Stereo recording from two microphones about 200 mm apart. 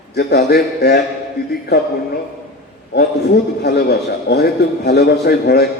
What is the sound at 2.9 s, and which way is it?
A man's voice, 55° left (ahead or behind).